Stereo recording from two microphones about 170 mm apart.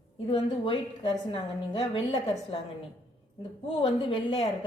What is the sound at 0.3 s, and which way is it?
A woman's voice, 30° left (ahead or behind).